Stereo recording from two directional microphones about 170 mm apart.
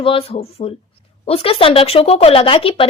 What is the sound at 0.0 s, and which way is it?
Speech, 30° left (ahead or behind).